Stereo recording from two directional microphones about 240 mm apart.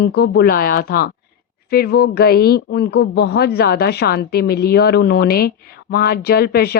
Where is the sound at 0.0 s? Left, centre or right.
Left.